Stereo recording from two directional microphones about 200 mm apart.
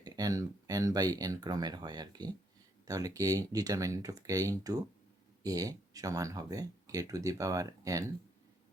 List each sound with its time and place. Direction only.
0.0 s speech: 20° right (ahead or behind)